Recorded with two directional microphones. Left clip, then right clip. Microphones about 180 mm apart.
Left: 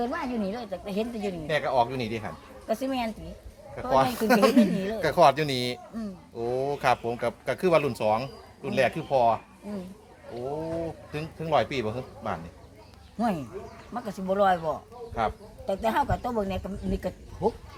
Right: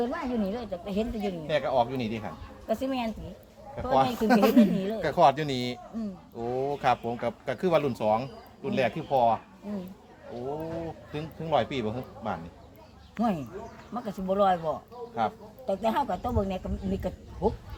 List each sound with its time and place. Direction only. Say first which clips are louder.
0.0 s speech: even; 15° right (ahead or behind)
1.5 s speech: left 1 dB; 25° left (ahead or behind)
2.6 s speech: left 1 dB; 10° right (ahead or behind)
3.9 s speech: left 1 dB; 25° left (ahead or behind)
4.5 s speech: even; 10° right (ahead or behind)
4.9 s speech: left 2 dB; 25° left (ahead or behind)
11.1 s speech: left 2 dB; 25° left (ahead or behind)
13.1 s a man's voice: left 1 dB; 10° right (ahead or behind)
15.2 s speech: left 1 dB; 25° left (ahead or behind)
15.6 s speech: left 1 dB; 15° right (ahead or behind)